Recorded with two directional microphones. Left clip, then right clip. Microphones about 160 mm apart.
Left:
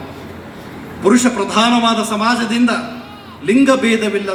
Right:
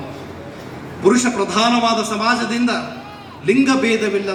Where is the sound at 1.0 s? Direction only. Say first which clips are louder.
Left 2 dB; 25° right (ahead or behind).